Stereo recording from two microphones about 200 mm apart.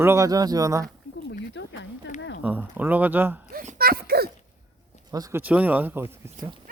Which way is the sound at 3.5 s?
45° right (ahead or behind).